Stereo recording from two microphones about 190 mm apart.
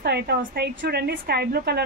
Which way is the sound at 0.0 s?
55° right (ahead or behind).